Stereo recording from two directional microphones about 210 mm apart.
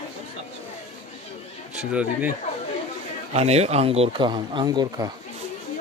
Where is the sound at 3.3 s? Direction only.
30° right (ahead or behind).